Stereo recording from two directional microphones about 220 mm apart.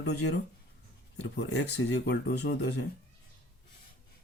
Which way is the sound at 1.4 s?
50° left (ahead or behind).